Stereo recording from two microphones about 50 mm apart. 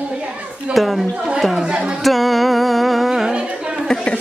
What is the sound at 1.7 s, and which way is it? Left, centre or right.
Speech, centre.